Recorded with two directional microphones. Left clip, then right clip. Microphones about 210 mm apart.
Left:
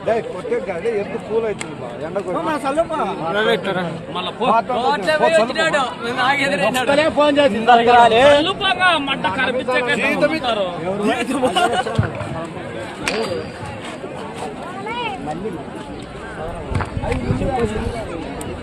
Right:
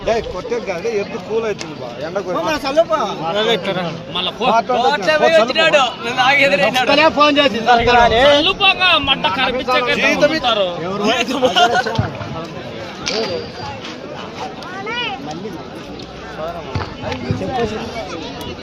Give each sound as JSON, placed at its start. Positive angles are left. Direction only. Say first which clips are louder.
{"t": 0.0, "sound": "a man's voice", "louder": "right 1 dB", "side_deg": -40}
{"t": 3.3, "sound": "a man's voice", "louder": "right 1 dB", "side_deg": 0}
{"t": 4.1, "sound": "speech", "louder": "right 2 dB", "side_deg": -45}
{"t": 4.7, "sound": "a man's voice", "louder": "right 3 dB", "side_deg": -35}
{"t": 7.7, "sound": "a man's voice", "louder": "left 1 dB", "side_deg": 0}
{"t": 8.4, "sound": "speech", "louder": "right 3 dB", "side_deg": -45}
{"t": 11.0, "sound": "a man's voice", "louder": "right 4 dB", "side_deg": -20}